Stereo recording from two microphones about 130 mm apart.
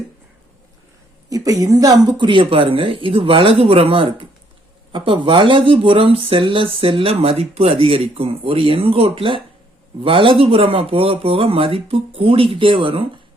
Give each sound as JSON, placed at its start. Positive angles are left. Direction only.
{"t": 1.3, "sound": "speech", "side_deg": -30}